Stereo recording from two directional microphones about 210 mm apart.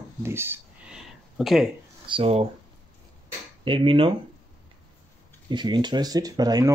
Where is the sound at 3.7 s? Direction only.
25° right (ahead or behind).